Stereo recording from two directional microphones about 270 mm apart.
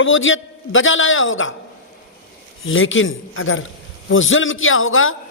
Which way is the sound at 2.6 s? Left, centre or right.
Left.